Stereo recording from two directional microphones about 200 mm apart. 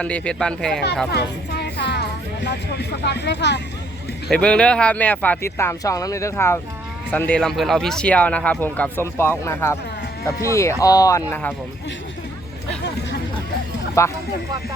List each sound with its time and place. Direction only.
0.0 s speech: 5° left (ahead or behind)
1.1 s speech: 55° left (ahead or behind)
4.3 s speech: 5° left (ahead or behind)
14.0 s speech: 15° left (ahead or behind)